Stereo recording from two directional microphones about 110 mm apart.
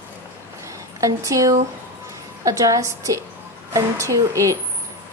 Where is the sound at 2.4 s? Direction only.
30° right (ahead or behind).